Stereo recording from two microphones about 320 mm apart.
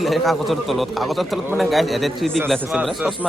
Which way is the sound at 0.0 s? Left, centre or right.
Centre.